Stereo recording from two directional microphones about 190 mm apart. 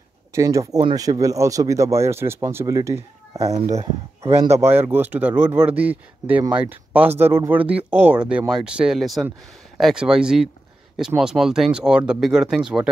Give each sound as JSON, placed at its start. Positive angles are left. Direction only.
{"t": 0.3, "sound": "speech", "side_deg": -15}
{"t": 4.4, "sound": "speech", "side_deg": -15}